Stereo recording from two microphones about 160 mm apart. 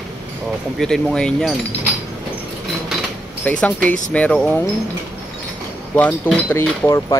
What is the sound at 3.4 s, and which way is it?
Speech, 10° left (ahead or behind).